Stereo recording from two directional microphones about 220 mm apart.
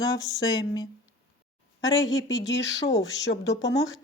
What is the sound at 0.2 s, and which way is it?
Speech, 15° left (ahead or behind).